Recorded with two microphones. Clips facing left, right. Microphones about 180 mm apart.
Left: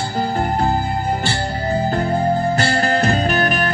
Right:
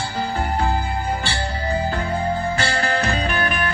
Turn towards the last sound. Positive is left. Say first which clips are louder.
# left 4 dB
turn(degrees=40)  # may be behind; listen again after turning